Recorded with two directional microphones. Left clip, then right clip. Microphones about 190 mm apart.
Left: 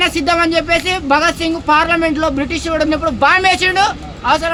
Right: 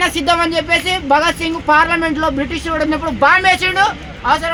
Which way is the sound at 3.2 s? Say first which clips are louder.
Right 1 dB; 30° left (ahead or behind).